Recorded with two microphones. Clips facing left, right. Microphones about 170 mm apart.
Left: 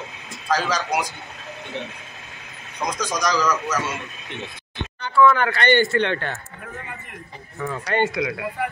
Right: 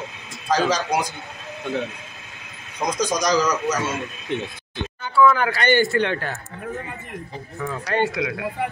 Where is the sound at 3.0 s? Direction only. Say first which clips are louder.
Right 3 dB; 20° right (ahead or behind).